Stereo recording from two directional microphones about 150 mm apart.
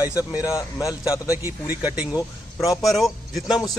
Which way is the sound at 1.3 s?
15° right (ahead or behind).